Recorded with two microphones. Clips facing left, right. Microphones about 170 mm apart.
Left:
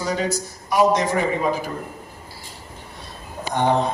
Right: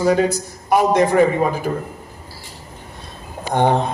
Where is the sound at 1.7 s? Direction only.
50° right (ahead or behind).